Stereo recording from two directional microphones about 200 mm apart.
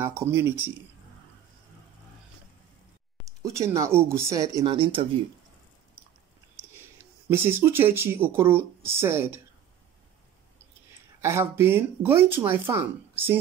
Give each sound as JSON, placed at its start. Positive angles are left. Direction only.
{"t": 0.0, "sound": "speech", "side_deg": -15}
{"t": 3.5, "sound": "speech", "side_deg": -15}
{"t": 7.2, "sound": "speech", "side_deg": -10}
{"t": 11.1, "sound": "speech", "side_deg": -15}